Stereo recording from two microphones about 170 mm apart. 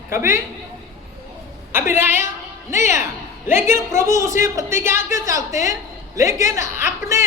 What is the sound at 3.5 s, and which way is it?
Speech, 15° right (ahead or behind).